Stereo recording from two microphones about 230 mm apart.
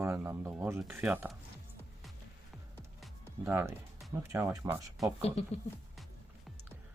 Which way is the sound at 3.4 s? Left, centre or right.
Centre.